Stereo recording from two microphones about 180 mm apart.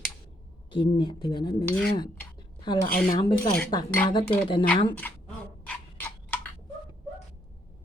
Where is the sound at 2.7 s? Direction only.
25° left (ahead or behind).